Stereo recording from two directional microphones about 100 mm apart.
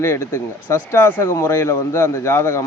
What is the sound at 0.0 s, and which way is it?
Speech, 25° left (ahead or behind).